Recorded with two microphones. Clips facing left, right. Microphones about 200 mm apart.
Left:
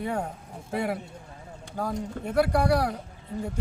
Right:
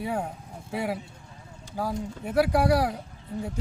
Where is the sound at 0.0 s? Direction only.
5° right (ahead or behind).